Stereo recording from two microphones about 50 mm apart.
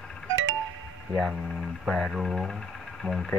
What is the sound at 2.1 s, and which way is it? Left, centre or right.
Speech, centre.